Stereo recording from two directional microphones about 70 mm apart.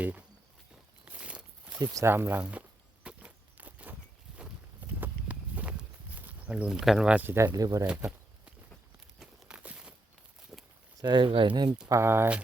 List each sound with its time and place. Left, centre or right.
0.0 s speech: right
1.0 s walk: centre
2.0 s speech: right
2.4 s walk: centre
4.9 s walk: right
6.1 s a sound: right
6.5 s speech: centre
7.1 s speech: right
7.5 s speech: right
9.1 s a sound: centre
11.0 s speech: right
11.9 s speech: right